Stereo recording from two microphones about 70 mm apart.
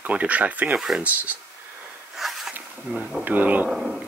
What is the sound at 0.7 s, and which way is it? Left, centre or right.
Speech, centre.